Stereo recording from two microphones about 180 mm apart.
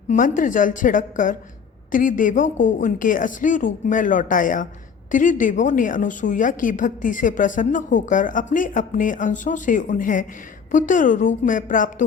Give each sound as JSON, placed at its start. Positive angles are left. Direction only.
{"t": 0.1, "sound": "a woman's voice", "side_deg": 45}